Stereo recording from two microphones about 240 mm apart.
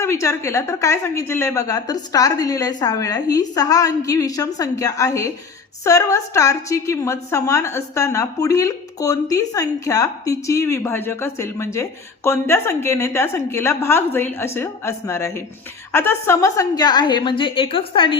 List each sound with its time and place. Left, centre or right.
0.0 s a woman's voice: centre